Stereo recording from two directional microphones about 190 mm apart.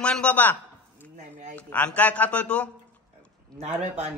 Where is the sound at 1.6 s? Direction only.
10° left (ahead or behind).